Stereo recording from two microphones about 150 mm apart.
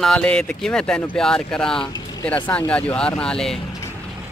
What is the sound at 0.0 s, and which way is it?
Speech, 5° left (ahead or behind).